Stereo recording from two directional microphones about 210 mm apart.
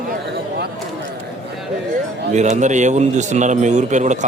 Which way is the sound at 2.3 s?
35° right (ahead or behind).